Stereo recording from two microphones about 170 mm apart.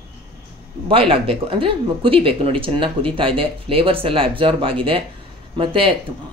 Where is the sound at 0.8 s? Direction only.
35° right (ahead or behind).